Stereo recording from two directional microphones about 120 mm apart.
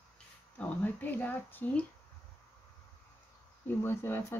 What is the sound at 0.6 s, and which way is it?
Speech, 15° left (ahead or behind).